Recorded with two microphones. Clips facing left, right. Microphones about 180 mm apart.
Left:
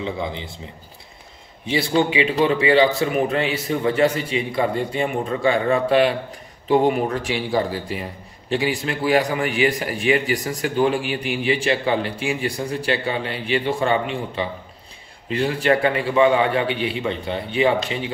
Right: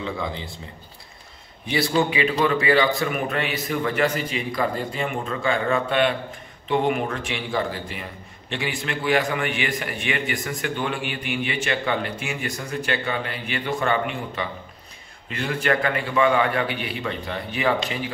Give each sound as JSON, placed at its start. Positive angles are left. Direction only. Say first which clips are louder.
{"t": 0.0, "sound": "a man's voice", "louder": "left 2 dB", "side_deg": 25}
{"t": 1.7, "sound": "a man's voice", "louder": "left 2 dB", "side_deg": 25}